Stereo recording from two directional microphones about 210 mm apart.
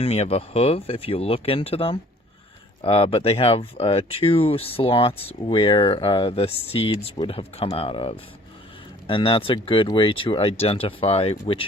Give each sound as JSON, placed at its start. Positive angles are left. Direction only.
{"t": 0.0, "sound": "speech", "side_deg": 30}